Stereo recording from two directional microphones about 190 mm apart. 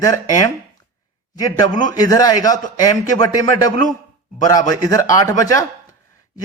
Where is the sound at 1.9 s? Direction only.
20° left (ahead or behind).